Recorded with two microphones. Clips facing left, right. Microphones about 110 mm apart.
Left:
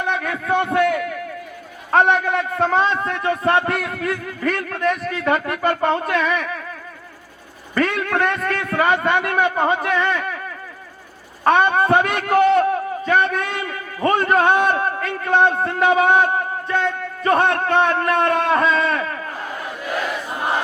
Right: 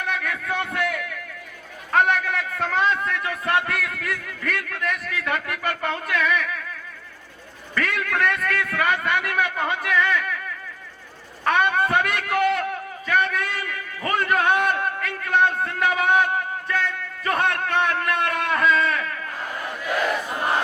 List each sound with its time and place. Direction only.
0.0 s a sound: 30° left (ahead or behind)
1.9 s a man's voice: 30° left (ahead or behind)
7.8 s a man's voice: 30° left (ahead or behind)
11.4 s a man's voice: 30° left (ahead or behind)